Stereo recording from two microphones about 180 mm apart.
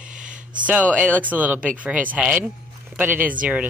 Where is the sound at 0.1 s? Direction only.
45° right (ahead or behind).